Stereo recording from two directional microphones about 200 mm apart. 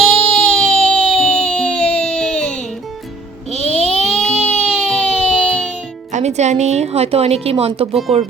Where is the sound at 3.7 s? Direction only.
5° left (ahead or behind).